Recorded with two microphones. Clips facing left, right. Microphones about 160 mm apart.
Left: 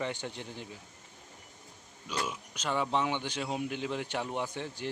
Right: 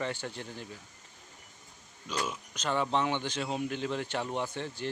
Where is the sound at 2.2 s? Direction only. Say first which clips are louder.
Right 1 dB; 10° left (ahead or behind).